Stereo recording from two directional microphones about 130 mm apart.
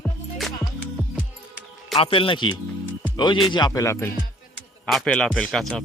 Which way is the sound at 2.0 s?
45° left (ahead or behind).